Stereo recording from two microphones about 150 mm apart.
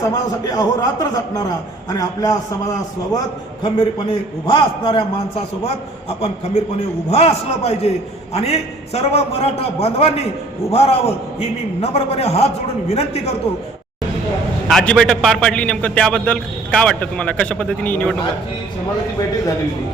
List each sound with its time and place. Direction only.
0.0 s a man's voice: 25° left (ahead or behind)
3.6 s a man's voice: 30° left (ahead or behind)
7.1 s a man's voice: 45° left (ahead or behind)
14.7 s a man's voice: 5° left (ahead or behind)